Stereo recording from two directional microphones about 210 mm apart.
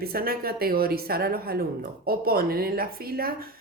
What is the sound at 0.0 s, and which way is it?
Speech, 45° right (ahead or behind).